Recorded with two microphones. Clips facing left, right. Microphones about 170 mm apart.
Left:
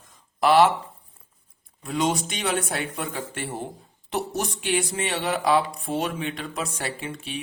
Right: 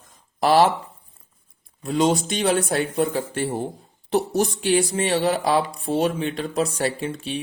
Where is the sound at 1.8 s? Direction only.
30° right (ahead or behind).